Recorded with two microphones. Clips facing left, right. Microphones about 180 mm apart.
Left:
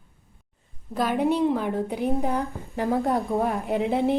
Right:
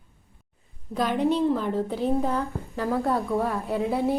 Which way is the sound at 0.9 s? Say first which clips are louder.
Even; 5° left (ahead or behind).